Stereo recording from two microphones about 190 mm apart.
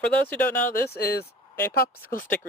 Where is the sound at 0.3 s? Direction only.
10° left (ahead or behind).